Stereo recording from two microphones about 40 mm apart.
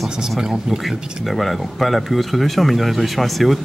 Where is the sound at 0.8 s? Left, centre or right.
Centre.